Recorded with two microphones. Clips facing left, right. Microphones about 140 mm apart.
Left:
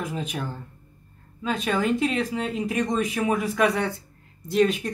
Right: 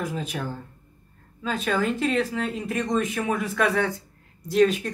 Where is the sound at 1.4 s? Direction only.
Centre (ahead or behind).